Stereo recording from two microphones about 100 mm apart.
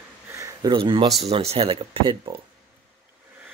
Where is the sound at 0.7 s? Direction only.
55° right (ahead or behind).